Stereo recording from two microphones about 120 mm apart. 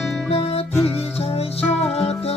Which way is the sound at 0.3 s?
55° left (ahead or behind).